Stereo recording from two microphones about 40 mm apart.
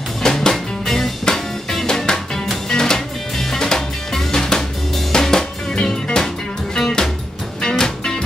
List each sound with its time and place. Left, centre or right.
0.2 s music: centre